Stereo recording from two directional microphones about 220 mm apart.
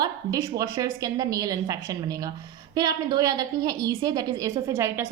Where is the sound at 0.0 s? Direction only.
15° right (ahead or behind).